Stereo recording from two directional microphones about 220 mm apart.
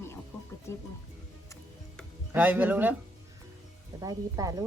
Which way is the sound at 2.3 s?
10° right (ahead or behind).